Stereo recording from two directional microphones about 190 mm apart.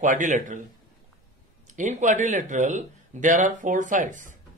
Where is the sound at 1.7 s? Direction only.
40° right (ahead or behind).